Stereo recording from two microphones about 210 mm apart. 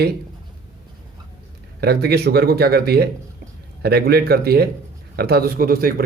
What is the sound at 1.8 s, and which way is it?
Speech, 50° right (ahead or behind).